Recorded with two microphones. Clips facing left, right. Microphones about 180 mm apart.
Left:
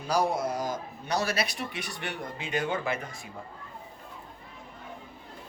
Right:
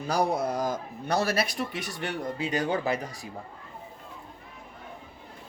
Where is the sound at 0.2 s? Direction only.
60° right (ahead or behind); by 3.2 s 35° right (ahead or behind).